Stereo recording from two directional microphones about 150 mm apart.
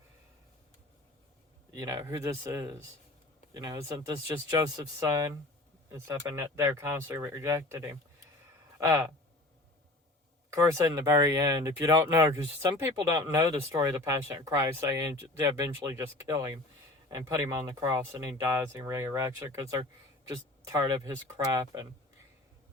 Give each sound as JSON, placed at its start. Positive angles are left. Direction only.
{"t": 1.7, "sound": "speech", "side_deg": -25}
{"t": 10.5, "sound": "speech", "side_deg": -20}